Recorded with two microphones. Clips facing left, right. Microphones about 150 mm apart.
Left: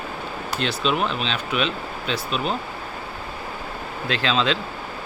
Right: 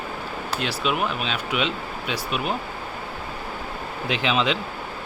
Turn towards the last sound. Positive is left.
turn(degrees=-15)  # may be behind; listen again after turning